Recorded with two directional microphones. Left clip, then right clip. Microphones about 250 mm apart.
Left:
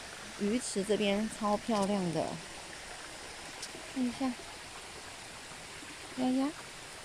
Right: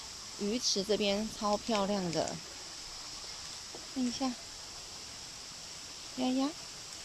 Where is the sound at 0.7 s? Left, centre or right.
Centre.